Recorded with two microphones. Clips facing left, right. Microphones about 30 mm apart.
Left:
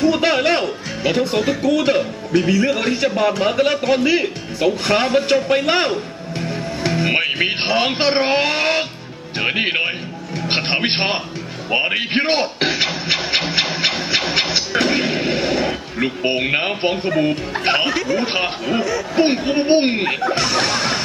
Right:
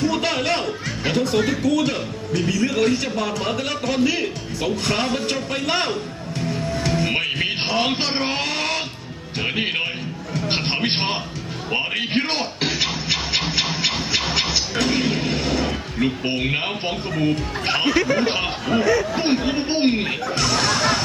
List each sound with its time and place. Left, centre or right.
0.0 s music: left
0.6 s music: centre
1.6 s a man's voice: left
14.1 s music: left
17.9 s speech: centre
18.3 s speech: centre
18.8 s speech: centre
19.1 s a man's voice: centre